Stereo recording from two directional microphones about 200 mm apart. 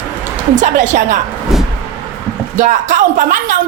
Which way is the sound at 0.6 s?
40° right (ahead or behind).